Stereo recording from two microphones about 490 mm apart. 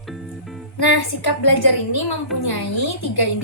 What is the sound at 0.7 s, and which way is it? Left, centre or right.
A woman's voice, left.